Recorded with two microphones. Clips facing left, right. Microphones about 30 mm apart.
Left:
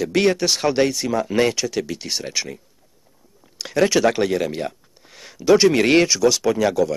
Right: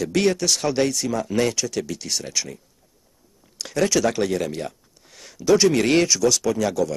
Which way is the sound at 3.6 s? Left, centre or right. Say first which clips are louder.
Left 3 dB; centre.